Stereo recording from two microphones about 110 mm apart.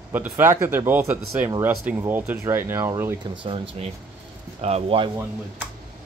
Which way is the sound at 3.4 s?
55° right (ahead or behind).